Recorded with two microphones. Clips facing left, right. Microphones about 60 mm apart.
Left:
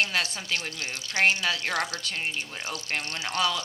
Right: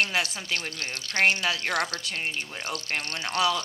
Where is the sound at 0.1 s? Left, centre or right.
Centre.